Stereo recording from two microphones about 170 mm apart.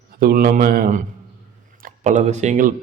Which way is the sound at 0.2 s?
60° right (ahead or behind).